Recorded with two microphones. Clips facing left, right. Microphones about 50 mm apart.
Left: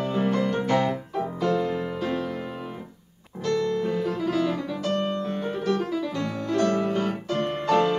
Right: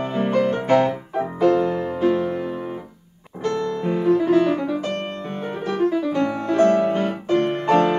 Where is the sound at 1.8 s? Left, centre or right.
Right.